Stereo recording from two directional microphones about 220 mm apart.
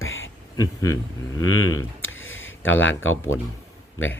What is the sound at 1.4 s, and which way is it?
Speech, 75° left (ahead or behind).